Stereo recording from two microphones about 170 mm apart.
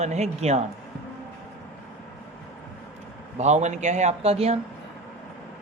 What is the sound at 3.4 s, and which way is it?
A man's voice, 40° right (ahead or behind).